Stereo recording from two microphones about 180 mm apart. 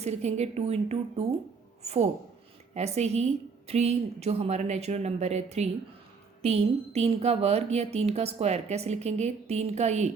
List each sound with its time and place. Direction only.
0.0 s speech: 35° right (ahead or behind)